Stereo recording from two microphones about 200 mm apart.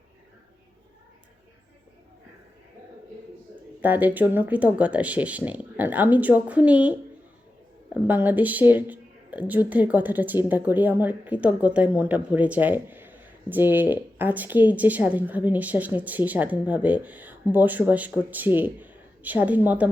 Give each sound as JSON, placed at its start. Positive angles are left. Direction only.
{"t": 3.5, "sound": "speech", "side_deg": -10}
{"t": 8.0, "sound": "speech", "side_deg": -10}